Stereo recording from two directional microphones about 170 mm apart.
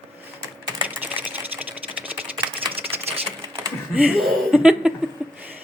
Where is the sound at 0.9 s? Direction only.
10° right (ahead or behind).